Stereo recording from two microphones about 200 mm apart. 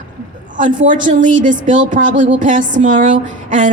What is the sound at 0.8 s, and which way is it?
A woman's voice, 40° right (ahead or behind).